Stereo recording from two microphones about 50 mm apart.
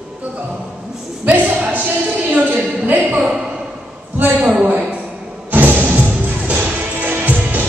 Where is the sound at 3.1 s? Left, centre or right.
Centre.